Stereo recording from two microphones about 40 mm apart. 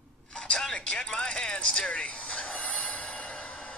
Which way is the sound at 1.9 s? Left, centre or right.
Left.